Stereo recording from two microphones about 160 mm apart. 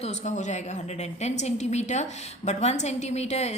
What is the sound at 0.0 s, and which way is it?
A woman's voice, 45° left (ahead or behind).